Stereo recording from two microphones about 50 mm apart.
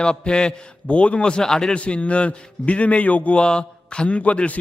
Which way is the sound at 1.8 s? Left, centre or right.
Left.